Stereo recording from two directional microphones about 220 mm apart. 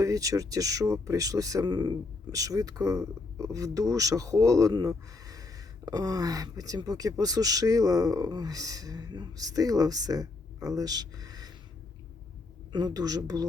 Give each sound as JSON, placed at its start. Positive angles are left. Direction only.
{"t": 0.0, "sound": "speech", "side_deg": -15}
{"t": 12.7, "sound": "speech", "side_deg": -15}